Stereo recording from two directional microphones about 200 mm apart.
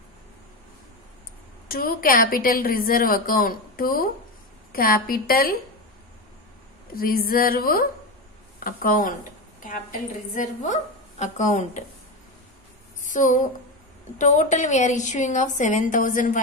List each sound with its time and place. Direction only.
1.7 s a woman's voice: 50° left (ahead or behind)
7.0 s a woman's voice: 45° left (ahead or behind)
13.0 s a woman's voice: 40° left (ahead or behind)